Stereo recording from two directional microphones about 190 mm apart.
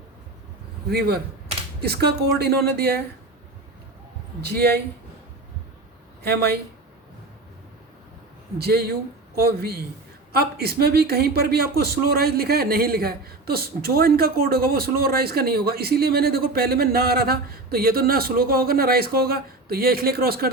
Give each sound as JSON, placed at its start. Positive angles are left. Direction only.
{"t": 0.9, "sound": "a man's voice", "side_deg": -55}
{"t": 4.4, "sound": "a man's voice", "side_deg": -55}
{"t": 6.2, "sound": "a man's voice", "side_deg": -60}
{"t": 8.5, "sound": "a man's voice", "side_deg": -55}